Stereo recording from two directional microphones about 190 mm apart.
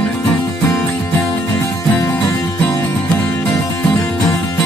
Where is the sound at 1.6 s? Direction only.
15° left (ahead or behind).